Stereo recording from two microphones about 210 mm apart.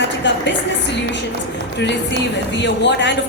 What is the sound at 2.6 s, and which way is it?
Speech, 55° left (ahead or behind).